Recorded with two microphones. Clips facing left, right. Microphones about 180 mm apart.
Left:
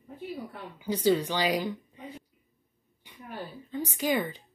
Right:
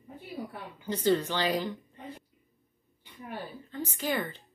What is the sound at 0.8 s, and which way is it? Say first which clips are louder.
A woman's voice: left 2 dB; 10° left (ahead or behind).